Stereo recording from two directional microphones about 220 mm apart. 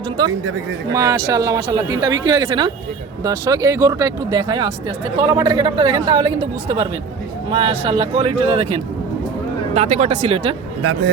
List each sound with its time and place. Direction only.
0.9 s speech: 15° right (ahead or behind)
10.8 s a man's voice: 60° right (ahead or behind)